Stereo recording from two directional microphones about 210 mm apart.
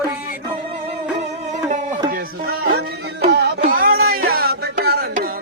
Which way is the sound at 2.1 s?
45° right (ahead or behind).